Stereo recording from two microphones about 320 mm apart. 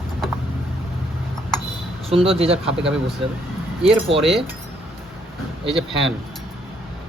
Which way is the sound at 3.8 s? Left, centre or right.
Centre.